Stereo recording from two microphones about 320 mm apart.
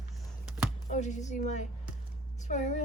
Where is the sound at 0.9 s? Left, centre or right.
Left.